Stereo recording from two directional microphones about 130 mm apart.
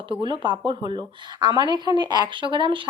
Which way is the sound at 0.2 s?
35° right (ahead or behind).